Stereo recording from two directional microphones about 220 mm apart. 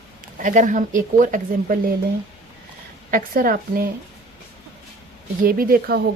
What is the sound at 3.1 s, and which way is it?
Speech, 40° right (ahead or behind).